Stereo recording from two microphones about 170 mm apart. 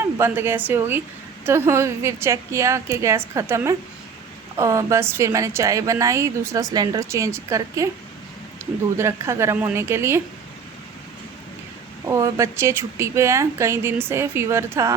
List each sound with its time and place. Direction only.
0.0 s a woman's voice: 15° right (ahead or behind)
9.0 s a woman's voice: 15° right (ahead or behind)
12.0 s a woman's voice: 15° right (ahead or behind)